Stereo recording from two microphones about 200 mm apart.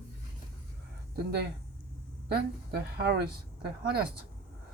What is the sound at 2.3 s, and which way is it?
Speech, 55° right (ahead or behind).